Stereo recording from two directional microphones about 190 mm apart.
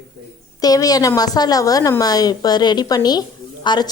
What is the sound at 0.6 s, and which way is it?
A woman's voice, 20° left (ahead or behind).